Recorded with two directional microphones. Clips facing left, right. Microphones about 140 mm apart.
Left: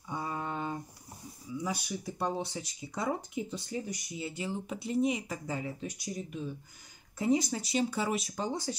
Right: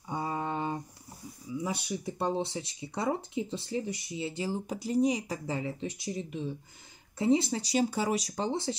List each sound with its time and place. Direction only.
0.1 s a sound: 30° right (ahead or behind)
1.6 s speech: 25° right (ahead or behind)
7.7 s speech: 40° right (ahead or behind)